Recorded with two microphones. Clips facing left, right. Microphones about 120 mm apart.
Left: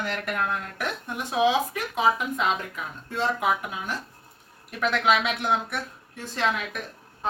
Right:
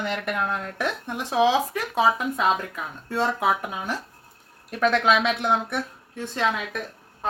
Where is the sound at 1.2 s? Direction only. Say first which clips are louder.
Right 2 dB; 30° right (ahead or behind).